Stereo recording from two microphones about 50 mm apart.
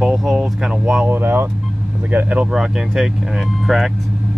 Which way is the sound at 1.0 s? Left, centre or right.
Right.